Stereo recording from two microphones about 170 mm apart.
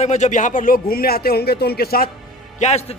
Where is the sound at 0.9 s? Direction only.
65° left (ahead or behind).